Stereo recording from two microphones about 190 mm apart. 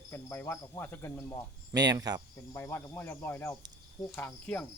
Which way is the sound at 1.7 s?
20° right (ahead or behind).